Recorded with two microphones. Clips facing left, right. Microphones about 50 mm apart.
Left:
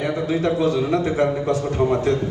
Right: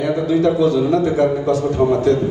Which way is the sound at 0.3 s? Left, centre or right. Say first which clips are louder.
Right 5 dB; left.